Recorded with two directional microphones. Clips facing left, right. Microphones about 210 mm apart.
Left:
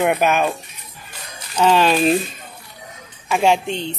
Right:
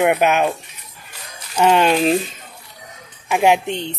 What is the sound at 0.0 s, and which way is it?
Speech, 15° right (ahead or behind).